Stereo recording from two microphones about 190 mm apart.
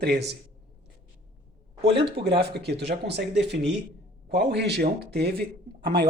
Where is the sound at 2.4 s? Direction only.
60° right (ahead or behind).